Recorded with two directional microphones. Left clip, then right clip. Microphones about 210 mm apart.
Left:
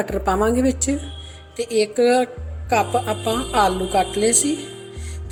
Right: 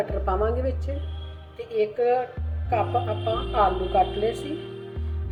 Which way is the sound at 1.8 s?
70° left (ahead or behind).